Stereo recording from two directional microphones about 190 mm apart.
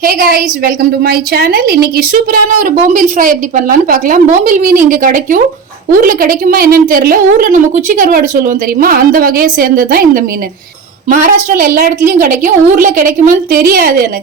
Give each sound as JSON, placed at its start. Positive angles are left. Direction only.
{"t": 0.0, "sound": "a woman's voice", "side_deg": -50}